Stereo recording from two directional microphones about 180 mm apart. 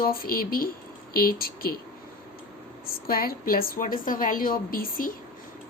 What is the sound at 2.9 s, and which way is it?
A woman's voice, 55° left (ahead or behind).